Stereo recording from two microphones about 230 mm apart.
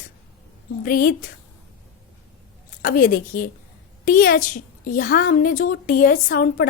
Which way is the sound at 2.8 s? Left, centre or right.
Left.